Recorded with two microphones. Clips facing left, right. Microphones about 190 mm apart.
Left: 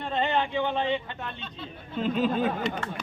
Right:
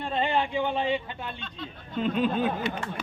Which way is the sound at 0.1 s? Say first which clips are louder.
Even; 10° right (ahead or behind).